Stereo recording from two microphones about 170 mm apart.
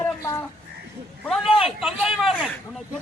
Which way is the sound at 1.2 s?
Centre (ahead or behind).